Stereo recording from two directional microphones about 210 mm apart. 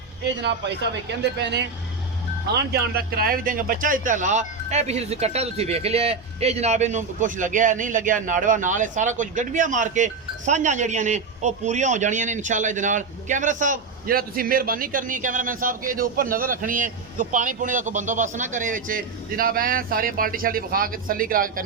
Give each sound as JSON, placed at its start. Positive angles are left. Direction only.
{"t": 0.4, "sound": "speech", "side_deg": -55}